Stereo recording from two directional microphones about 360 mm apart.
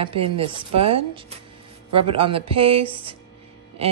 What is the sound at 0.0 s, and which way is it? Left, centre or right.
Speech, centre.